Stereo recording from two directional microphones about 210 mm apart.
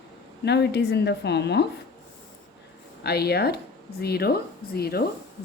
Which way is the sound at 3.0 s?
50° left (ahead or behind).